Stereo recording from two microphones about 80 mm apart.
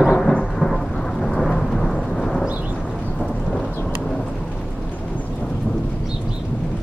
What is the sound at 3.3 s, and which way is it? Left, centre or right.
Thunder, centre.